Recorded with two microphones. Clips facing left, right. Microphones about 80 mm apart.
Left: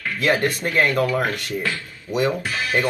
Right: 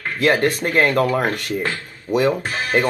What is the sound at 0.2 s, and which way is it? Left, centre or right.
Speech, right.